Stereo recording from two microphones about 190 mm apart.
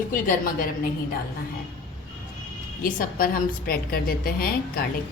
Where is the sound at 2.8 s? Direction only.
50° left (ahead or behind).